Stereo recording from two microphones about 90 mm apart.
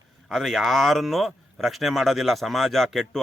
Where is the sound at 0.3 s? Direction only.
Centre (ahead or behind).